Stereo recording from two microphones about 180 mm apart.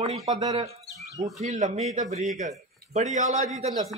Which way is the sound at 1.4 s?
40° right (ahead or behind).